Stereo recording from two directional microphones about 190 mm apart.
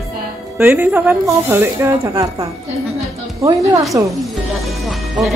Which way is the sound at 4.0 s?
10° right (ahead or behind).